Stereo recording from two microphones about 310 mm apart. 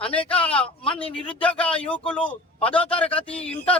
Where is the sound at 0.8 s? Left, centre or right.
Centre.